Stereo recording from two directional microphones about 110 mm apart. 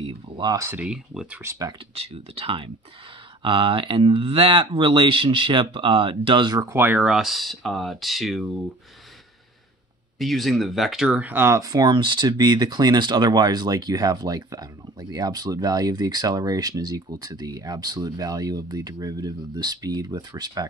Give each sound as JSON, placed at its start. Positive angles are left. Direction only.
{"t": 0.4, "sound": "speech", "side_deg": -30}
{"t": 0.7, "sound": "speech", "side_deg": -5}
{"t": 1.4, "sound": "speech", "side_deg": -25}
{"t": 2.0, "sound": "speech", "side_deg": -65}
{"t": 6.7, "sound": "speech", "side_deg": -15}
{"t": 7.1, "sound": "speech", "side_deg": 0}
{"t": 10.1, "sound": "speech", "side_deg": 0}